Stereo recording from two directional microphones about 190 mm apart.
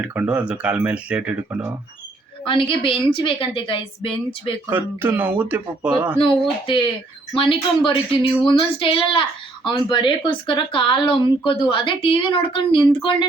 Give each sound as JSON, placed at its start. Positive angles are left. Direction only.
{"t": 0.0, "sound": "speech", "side_deg": -5}
{"t": 2.4, "sound": "speech", "side_deg": 25}
{"t": 4.7, "sound": "speech", "side_deg": -10}
{"t": 6.7, "sound": "speech", "side_deg": 25}